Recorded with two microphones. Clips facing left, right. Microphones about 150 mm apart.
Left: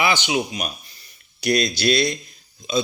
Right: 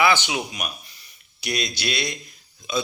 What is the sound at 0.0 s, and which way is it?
Speech, 20° left (ahead or behind).